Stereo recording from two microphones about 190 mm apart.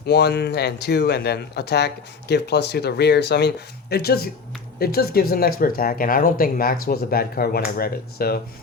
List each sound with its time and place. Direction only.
0.0 s speech: 60° left (ahead or behind)